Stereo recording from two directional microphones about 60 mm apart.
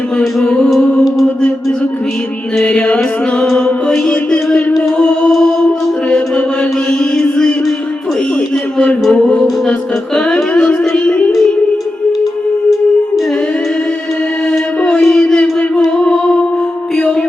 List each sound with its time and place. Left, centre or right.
0.3 s music: centre
2.6 s music: centre
3.4 s music: centre
7.0 s mantra: centre
9.1 s music: centre
10.3 s a sound: centre
15.0 s a sound: centre